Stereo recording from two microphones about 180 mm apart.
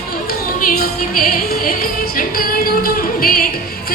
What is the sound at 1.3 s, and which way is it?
Speech, 50° left (ahead or behind).